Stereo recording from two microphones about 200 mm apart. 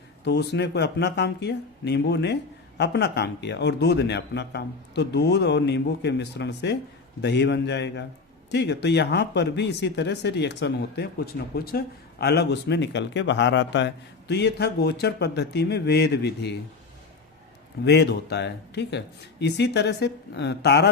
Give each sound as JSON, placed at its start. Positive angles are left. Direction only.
{"t": 0.3, "sound": "speech", "side_deg": 55}
{"t": 17.8, "sound": "speech", "side_deg": 55}